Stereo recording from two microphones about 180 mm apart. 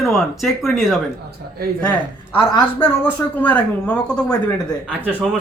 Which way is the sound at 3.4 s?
10° left (ahead or behind).